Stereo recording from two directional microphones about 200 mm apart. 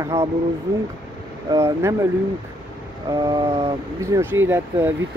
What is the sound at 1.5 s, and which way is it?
Speech, 15° right (ahead or behind).